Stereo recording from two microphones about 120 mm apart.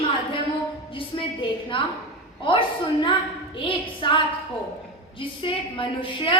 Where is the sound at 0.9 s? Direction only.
45° left (ahead or behind).